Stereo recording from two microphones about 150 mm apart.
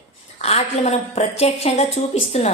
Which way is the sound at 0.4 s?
45° left (ahead or behind).